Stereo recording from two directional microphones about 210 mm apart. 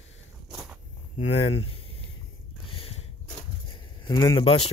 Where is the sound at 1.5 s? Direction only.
25° left (ahead or behind).